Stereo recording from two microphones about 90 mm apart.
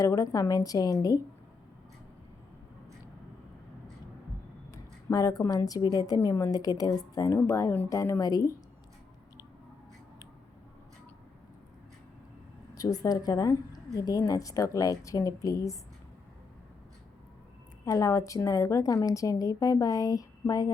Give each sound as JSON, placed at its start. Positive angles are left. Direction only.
{"t": 0.0, "sound": "a woman's voice", "side_deg": 40}
{"t": 5.1, "sound": "a woman's voice", "side_deg": 45}
{"t": 6.1, "sound": "a woman's voice", "side_deg": 30}
{"t": 7.3, "sound": "a woman's voice", "side_deg": 30}
{"t": 12.7, "sound": "a woman's voice", "side_deg": 45}
{"t": 17.8, "sound": "a woman's voice", "side_deg": 40}